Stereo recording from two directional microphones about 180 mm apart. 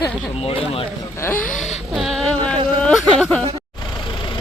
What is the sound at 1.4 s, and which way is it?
Speech, 45° left (ahead or behind).